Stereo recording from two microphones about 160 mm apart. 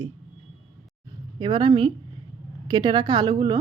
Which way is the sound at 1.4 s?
30° right (ahead or behind).